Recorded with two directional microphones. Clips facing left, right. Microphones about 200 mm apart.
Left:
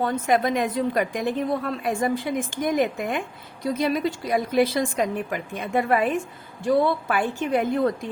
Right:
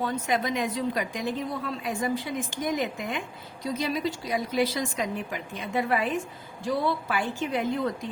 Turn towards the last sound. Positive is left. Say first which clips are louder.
# left 5 dB
turn(degrees=55)  # may be behind; listen again after turning